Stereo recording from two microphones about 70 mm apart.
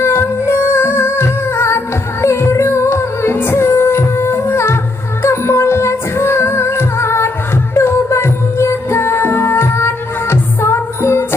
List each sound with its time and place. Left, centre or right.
0.0 s music: left